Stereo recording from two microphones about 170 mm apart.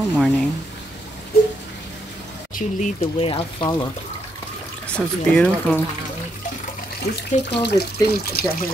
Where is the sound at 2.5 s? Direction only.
45° left (ahead or behind).